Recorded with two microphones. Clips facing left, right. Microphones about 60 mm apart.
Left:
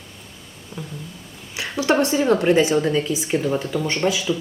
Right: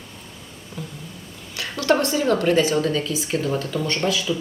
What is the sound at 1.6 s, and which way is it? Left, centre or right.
A woman's voice, centre.